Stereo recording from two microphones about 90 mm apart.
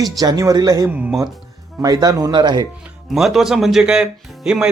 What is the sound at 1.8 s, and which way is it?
Speech, 45° right (ahead or behind).